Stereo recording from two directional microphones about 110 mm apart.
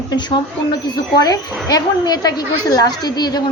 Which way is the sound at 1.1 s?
35° left (ahead or behind).